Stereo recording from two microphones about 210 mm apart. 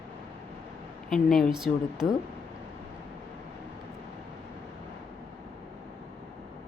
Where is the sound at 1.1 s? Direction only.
Centre (ahead or behind).